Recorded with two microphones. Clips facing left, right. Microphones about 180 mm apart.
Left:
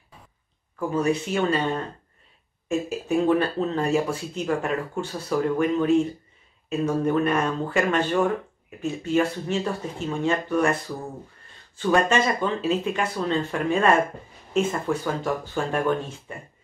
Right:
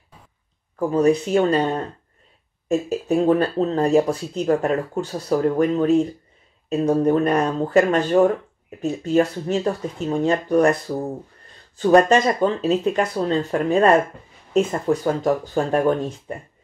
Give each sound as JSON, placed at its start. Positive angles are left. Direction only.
{"t": 0.7, "sound": "speech", "side_deg": -35}
{"t": 2.9, "sound": "speech", "side_deg": -35}